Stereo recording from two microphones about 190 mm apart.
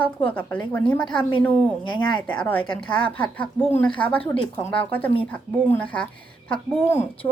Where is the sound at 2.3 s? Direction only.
10° left (ahead or behind).